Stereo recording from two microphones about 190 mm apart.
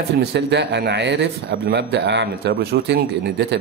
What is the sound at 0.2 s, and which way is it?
A man's voice, 65° right (ahead or behind).